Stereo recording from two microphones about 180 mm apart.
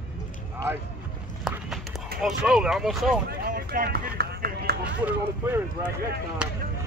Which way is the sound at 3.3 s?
55° right (ahead or behind).